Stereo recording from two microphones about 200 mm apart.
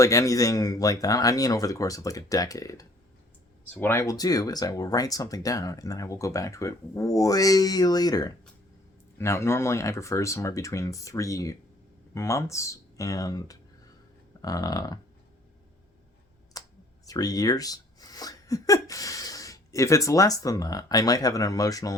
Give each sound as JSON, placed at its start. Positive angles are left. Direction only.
{"t": 0.0, "sound": "speech", "side_deg": 15}
{"t": 14.4, "sound": "a sound", "side_deg": 20}
{"t": 16.6, "sound": "computer keyboard", "side_deg": 15}
{"t": 17.1, "sound": "speech", "side_deg": 20}